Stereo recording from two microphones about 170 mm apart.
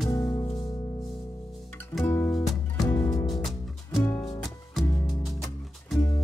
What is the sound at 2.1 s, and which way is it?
Music, 20° left (ahead or behind).